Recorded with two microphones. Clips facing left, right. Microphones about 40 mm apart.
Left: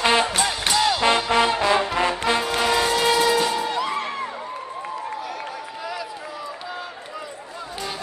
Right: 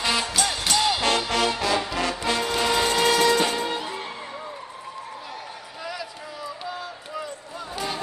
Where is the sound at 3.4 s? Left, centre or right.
Centre.